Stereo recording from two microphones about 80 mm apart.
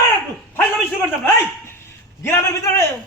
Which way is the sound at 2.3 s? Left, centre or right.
Left.